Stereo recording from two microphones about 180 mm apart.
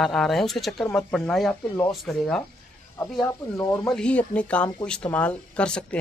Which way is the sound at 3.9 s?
5° left (ahead or behind).